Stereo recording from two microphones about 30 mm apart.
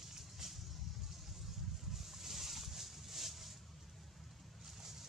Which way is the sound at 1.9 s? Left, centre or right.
Centre.